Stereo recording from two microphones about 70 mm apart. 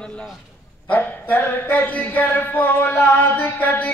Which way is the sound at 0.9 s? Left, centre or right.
Left.